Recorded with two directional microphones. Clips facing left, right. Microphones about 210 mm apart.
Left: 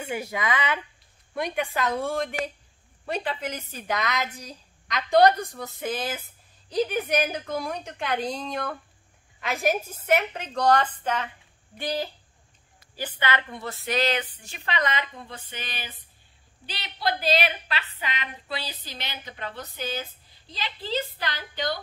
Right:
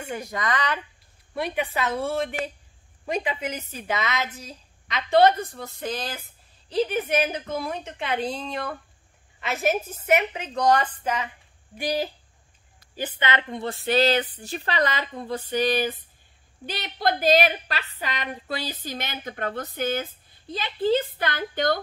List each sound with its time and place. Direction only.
0.0 s a woman's voice: 10° left (ahead or behind); by 13.7 s 25° right (ahead or behind)
13.8 s a sound: 35° right (ahead or behind)
16.6 s a woman's voice: 50° right (ahead or behind)